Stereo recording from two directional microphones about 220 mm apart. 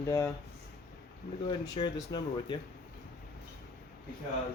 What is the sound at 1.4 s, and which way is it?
Speech, 20° left (ahead or behind).